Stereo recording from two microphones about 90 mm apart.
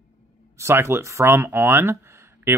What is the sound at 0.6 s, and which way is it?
Speech, 30° right (ahead or behind).